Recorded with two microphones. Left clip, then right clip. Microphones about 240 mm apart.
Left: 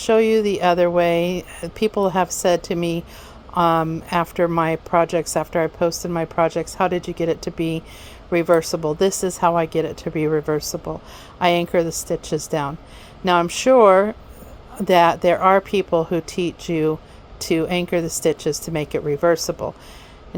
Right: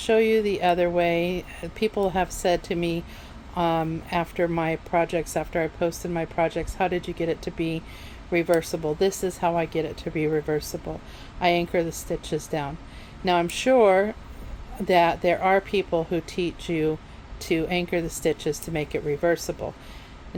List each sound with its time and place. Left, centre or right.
0.0 s speech: left